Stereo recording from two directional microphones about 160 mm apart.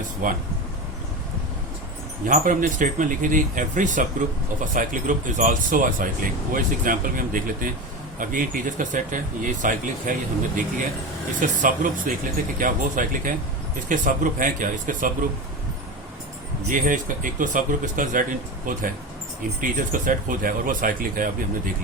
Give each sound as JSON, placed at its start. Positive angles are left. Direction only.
{"t": 0.2, "sound": "speech", "side_deg": -60}
{"t": 2.2, "sound": "speech", "side_deg": -55}
{"t": 16.6, "sound": "speech", "side_deg": -55}